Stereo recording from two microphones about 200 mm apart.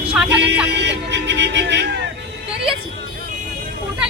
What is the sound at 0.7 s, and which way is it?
Speech, 60° right (ahead or behind).